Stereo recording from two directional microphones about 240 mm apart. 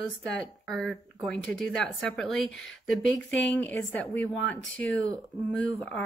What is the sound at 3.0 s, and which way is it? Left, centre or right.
Speech, left.